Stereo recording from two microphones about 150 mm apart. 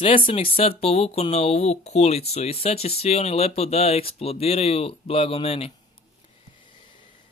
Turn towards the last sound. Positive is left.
turn(degrees=40)  # may be behind; listen again after turning